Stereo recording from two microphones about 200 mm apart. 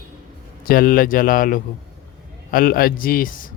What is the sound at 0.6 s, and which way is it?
Speech, 45° left (ahead or behind).